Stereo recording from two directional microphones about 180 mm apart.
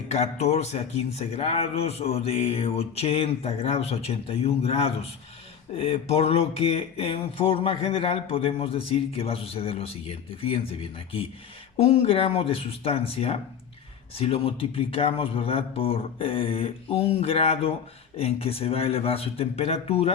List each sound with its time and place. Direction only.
0.1 s speech: 35° left (ahead or behind)
12.0 s speech: 35° left (ahead or behind)